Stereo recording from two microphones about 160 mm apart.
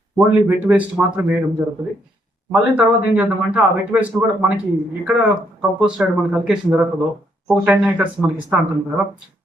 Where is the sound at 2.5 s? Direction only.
10° right (ahead or behind).